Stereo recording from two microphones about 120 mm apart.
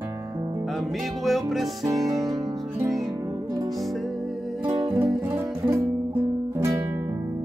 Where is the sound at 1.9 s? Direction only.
30° right (ahead or behind).